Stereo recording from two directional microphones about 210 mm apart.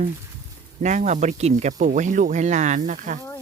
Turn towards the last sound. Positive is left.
turn(degrees=-40)  # may be behind; listen again after turning